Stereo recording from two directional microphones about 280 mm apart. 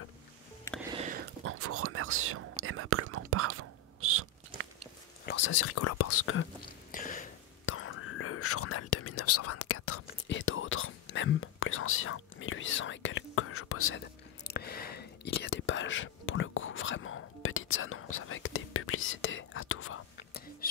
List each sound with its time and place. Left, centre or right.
0.9 s whispering: right
5.2 s whispering: left
6.9 s a sound: left
7.6 s whispering: left